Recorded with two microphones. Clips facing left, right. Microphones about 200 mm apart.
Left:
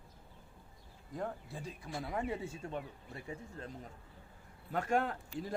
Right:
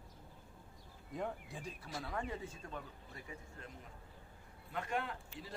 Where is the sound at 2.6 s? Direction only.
30° left (ahead or behind); by 5.5 s 45° left (ahead or behind).